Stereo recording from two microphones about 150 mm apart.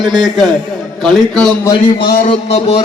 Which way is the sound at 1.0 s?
5° left (ahead or behind).